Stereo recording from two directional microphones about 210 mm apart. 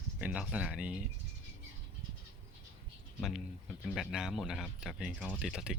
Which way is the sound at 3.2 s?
Centre (ahead or behind).